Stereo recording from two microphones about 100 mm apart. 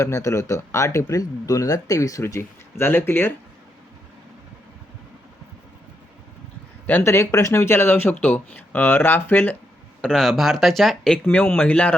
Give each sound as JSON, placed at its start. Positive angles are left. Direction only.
{"t": 0.0, "sound": "speech", "side_deg": 30}
{"t": 6.8, "sound": "speech", "side_deg": 25}
{"t": 10.0, "sound": "speech", "side_deg": 5}